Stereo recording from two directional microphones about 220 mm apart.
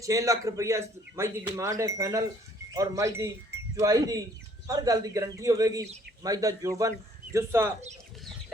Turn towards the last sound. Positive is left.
turn(degrees=-10)  # may be behind; listen again after turning